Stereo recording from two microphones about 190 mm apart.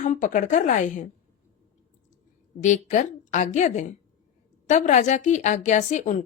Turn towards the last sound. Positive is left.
turn(degrees=40)  # may be behind; listen again after turning